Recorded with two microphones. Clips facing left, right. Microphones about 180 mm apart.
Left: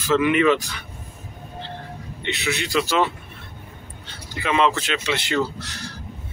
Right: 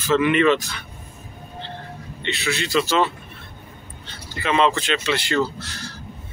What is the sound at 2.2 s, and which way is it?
Speech, 15° left (ahead or behind).